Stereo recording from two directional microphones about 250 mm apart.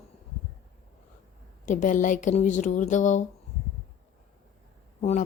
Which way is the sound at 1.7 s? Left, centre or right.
Left.